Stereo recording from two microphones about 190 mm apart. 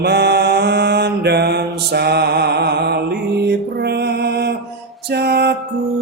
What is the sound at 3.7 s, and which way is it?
Music, 60° right (ahead or behind).